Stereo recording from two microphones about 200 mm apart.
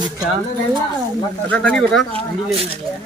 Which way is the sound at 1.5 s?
5° left (ahead or behind).